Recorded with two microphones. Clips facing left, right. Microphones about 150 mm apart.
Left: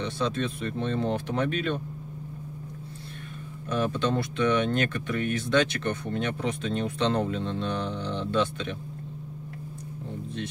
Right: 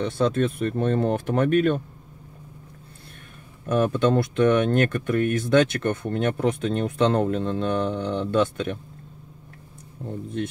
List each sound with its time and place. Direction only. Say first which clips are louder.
0.0 s speech: right 6 dB; 50° right (ahead or behind)
3.6 s speech: right 6 dB; 50° right (ahead or behind)